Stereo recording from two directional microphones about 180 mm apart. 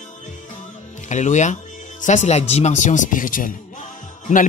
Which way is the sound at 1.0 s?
40° left (ahead or behind).